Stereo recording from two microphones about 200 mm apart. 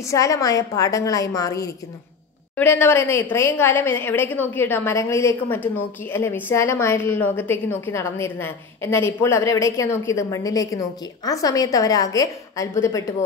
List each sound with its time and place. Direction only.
0.0 s a woman's voice: 15° left (ahead or behind)